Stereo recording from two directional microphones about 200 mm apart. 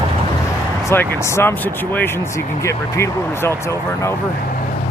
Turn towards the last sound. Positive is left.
turn(degrees=10)  # may be behind; listen again after turning